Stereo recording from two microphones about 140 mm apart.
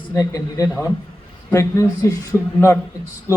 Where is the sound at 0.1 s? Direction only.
25° left (ahead or behind).